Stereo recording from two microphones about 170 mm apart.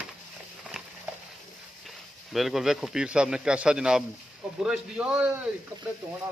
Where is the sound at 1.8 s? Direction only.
Centre (ahead or behind).